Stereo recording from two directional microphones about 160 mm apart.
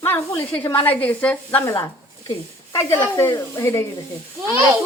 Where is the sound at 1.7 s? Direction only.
20° left (ahead or behind).